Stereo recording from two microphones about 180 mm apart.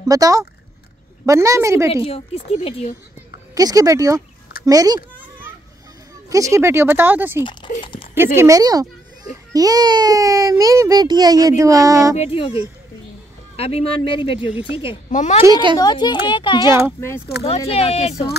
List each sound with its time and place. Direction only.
0.1 s speech: 20° right (ahead or behind)
2.0 s speech: 30° left (ahead or behind)
3.5 s speech: 20° right (ahead or behind)
6.3 s speech: 15° right (ahead or behind)
7.8 s a sound: 30° left (ahead or behind)
8.4 s speech: 20° right (ahead or behind)
12.2 s speech: 30° left (ahead or behind)
13.6 s speech: 35° left (ahead or behind)
15.0 s a woman's voice: 45° left (ahead or behind)
15.4 s speech: 20° right (ahead or behind)
15.8 s speech: 25° left (ahead or behind)